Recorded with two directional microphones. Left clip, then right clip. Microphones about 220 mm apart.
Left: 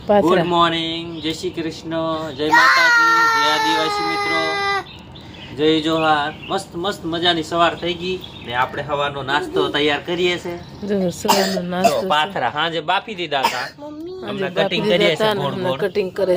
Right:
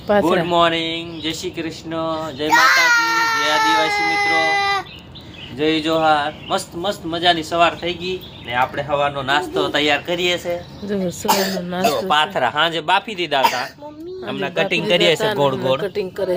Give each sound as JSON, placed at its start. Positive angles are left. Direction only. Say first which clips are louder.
{"t": 0.1, "sound": "speech", "louder": "left 1 dB", "side_deg": 0}
{"t": 0.5, "sound": "a man's voice", "louder": "right 1 dB", "side_deg": -10}
{"t": 10.8, "sound": "speech", "louder": "left 3 dB", "side_deg": 5}
{"t": 11.3, "sound": "speech", "louder": "left 1 dB", "side_deg": -5}
{"t": 11.9, "sound": "speech", "louder": "right 1 dB", "side_deg": -25}
{"t": 15.8, "sound": "speech", "louder": "left 3 dB", "side_deg": 15}